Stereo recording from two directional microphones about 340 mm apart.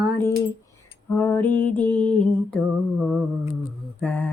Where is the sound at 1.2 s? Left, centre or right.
Centre.